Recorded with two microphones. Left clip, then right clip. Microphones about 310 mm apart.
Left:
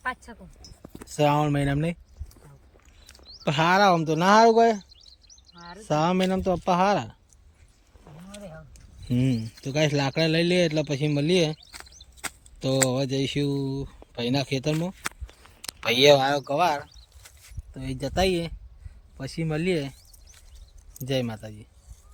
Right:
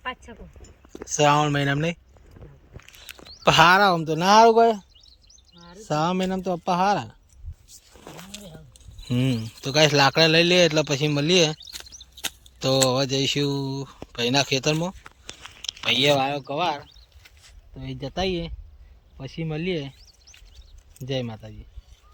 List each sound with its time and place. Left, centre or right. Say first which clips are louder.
0.0 s speech: left 1 dB; centre
3.4 s speech: right 5 dB; centre
9.0 s speech: right 1 dB; centre
16.0 s speech: left 4 dB; left
16.2 s speech: left 2 dB; centre
21.0 s speech: left 1 dB; centre